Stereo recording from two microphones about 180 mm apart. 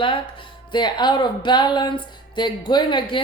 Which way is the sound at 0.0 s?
30° left (ahead or behind).